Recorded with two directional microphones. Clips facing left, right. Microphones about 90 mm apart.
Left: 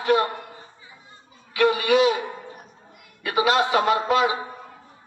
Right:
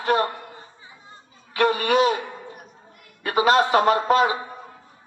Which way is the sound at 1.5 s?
40° right (ahead or behind).